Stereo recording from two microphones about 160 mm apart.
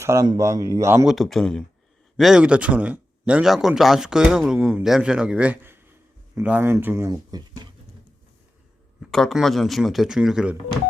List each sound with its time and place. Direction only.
0.0 s speech: 20° right (ahead or behind)
1.0 s speech: centre (ahead or behind); by 7.6 s 25° right (ahead or behind)
9.0 s speech: centre (ahead or behind)